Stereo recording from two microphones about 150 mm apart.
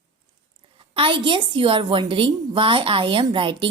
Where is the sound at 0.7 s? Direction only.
35° right (ahead or behind).